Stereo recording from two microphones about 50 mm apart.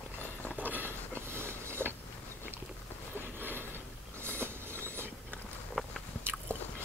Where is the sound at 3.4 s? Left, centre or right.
Right.